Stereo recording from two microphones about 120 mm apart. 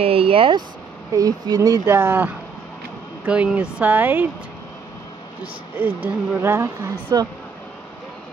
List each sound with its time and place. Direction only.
0.0 s speech: 50° right (ahead or behind)
1.1 s speech: 30° right (ahead or behind); by 4.3 s 15° right (ahead or behind)
6.0 s speech: 20° right (ahead or behind)